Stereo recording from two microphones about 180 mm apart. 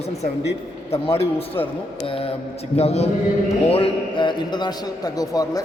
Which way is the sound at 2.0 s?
30° left (ahead or behind).